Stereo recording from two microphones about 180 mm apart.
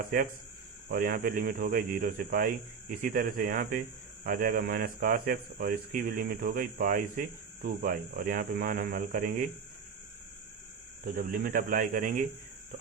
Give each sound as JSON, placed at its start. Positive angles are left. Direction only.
{"t": 0.1, "sound": "speech", "side_deg": -50}
{"t": 11.0, "sound": "speech", "side_deg": -50}